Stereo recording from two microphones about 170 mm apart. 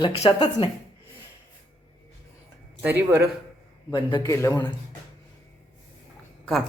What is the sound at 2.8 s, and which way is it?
Speech, 10° right (ahead or behind).